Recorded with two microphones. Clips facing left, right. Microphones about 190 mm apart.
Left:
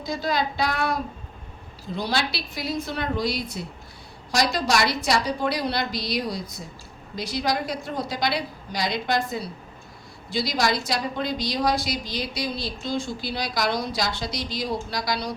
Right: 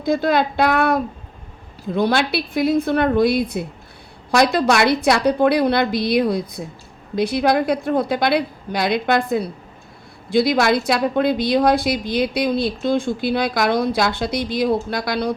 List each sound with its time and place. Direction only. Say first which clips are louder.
0.0 s a woman's voice: right 8 dB; 55° right (ahead or behind)